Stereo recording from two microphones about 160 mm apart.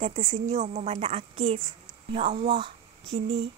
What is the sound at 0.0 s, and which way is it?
Speech, 50° right (ahead or behind).